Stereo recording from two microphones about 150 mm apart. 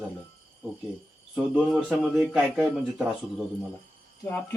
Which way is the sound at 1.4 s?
5° right (ahead or behind).